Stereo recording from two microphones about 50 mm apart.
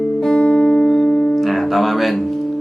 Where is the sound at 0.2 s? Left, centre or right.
Centre.